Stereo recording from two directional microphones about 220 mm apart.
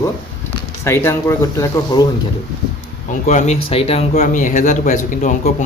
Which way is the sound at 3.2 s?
30° left (ahead or behind).